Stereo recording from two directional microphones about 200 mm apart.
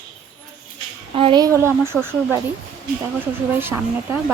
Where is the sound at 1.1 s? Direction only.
25° right (ahead or behind).